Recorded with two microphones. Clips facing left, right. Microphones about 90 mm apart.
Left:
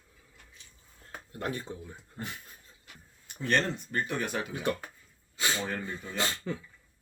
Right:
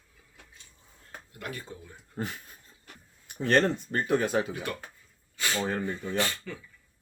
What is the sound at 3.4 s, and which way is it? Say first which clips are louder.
Speech: right 5 dB; 25° right (ahead or behind).